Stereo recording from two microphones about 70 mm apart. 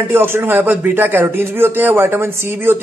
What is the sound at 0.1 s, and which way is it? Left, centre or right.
Speech, right.